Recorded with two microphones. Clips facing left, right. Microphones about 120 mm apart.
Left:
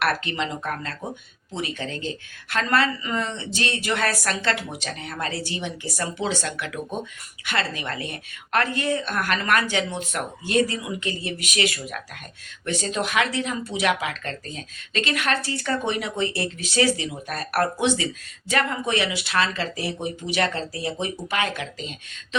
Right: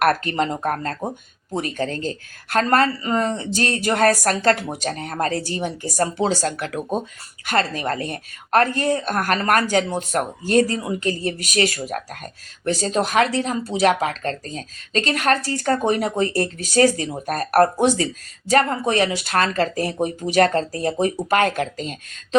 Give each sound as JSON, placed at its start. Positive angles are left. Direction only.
{"t": 0.0, "sound": "speech", "side_deg": -45}